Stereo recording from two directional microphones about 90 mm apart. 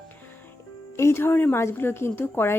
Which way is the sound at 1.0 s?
30° left (ahead or behind).